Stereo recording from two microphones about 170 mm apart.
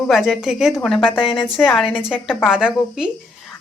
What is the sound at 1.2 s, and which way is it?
Speech, 30° left (ahead or behind).